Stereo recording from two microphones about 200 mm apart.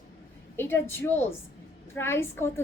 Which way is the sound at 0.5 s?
10° left (ahead or behind).